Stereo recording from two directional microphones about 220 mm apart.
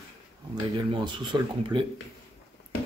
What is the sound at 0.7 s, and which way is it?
Speech, 20° right (ahead or behind).